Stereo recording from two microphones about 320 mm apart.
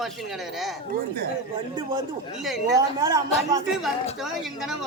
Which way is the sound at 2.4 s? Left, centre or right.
Centre.